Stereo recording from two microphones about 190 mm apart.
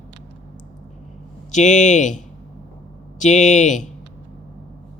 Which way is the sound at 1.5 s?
40° left (ahead or behind).